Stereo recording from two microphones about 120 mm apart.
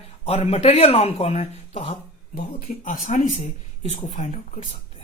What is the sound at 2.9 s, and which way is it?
Speech, 90° left.